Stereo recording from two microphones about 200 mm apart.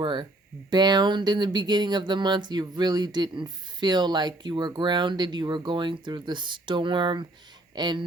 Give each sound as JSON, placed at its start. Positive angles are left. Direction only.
{"t": 0.0, "sound": "speech", "side_deg": -25}